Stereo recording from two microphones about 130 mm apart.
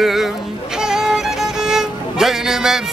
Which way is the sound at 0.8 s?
5° right (ahead or behind).